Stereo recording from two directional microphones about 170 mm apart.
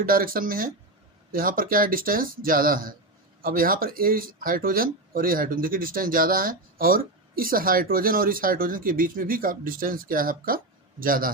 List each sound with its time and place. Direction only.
0.0 s speech: 55° right (ahead or behind)